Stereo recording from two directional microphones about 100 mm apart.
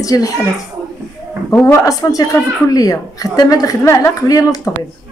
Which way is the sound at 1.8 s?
35° left (ahead or behind).